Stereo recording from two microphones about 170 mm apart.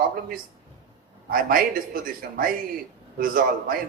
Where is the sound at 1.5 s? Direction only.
55° right (ahead or behind).